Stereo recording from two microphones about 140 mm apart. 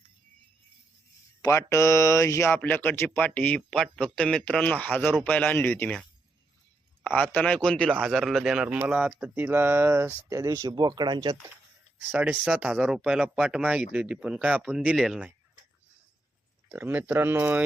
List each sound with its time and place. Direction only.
1.4 s speech: 20° left (ahead or behind)
7.2 s speech: 10° left (ahead or behind); by 11.3 s 30° right (ahead or behind)
11.9 s speech: 10° right (ahead or behind)
16.6 s speech: 15° right (ahead or behind)